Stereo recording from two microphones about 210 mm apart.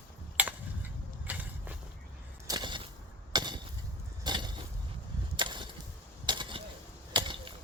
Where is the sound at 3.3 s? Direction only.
20° right (ahead or behind).